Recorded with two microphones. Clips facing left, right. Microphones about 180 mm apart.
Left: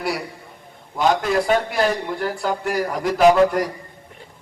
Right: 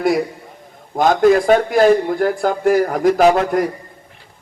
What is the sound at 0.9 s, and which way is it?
A man's voice, 45° right (ahead or behind).